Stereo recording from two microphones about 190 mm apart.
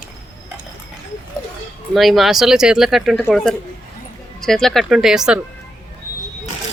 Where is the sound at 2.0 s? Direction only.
Centre (ahead or behind).